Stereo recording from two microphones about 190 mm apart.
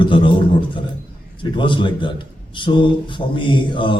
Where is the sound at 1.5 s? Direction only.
25° left (ahead or behind).